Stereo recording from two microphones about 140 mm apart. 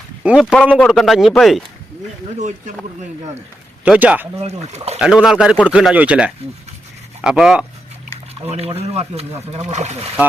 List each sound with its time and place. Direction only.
0.3 s speech: 5° right (ahead or behind)
3.8 s speech: 10° right (ahead or behind)
8.4 s speech: 45° right (ahead or behind)